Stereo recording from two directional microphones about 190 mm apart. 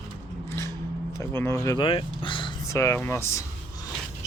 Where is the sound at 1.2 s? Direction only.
15° left (ahead or behind).